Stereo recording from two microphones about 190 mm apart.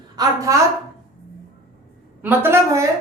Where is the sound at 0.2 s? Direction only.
15° right (ahead or behind).